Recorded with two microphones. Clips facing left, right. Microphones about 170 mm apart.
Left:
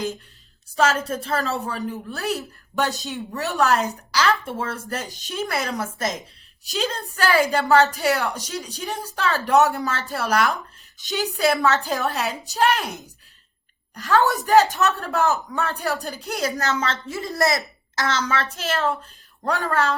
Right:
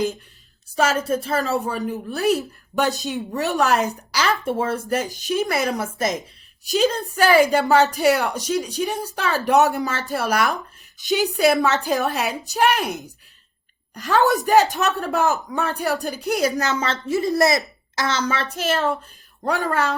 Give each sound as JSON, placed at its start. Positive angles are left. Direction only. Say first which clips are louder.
{"t": 0.8, "sound": "a woman's voice", "louder": "right 1 dB", "side_deg": -10}
{"t": 13.9, "sound": "a woman's voice", "louder": "right 1 dB", "side_deg": -15}